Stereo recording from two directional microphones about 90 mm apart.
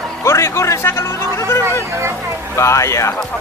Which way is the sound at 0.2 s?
30° left (ahead or behind).